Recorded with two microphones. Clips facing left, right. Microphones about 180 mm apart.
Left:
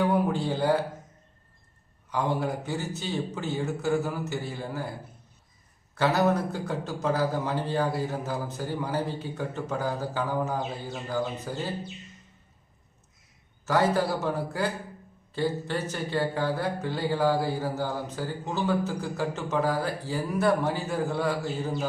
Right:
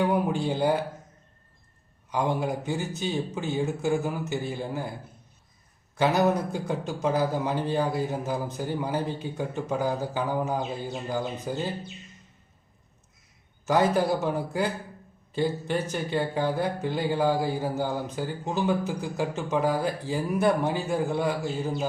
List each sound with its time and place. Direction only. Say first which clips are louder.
0.0 s a sound: even; 15° right (ahead or behind)
2.0 s speech: right 1 dB; 15° right (ahead or behind)
5.9 s speech: right 1 dB; 15° right (ahead or behind)
13.7 s speech: right 2 dB; 15° right (ahead or behind)